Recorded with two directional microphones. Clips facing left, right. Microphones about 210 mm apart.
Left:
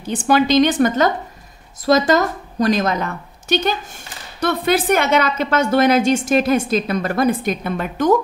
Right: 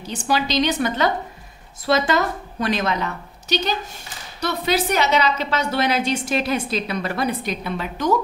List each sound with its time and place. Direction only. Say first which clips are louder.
0.0 s a woman's voice: left 7 dB; 50° left (ahead or behind)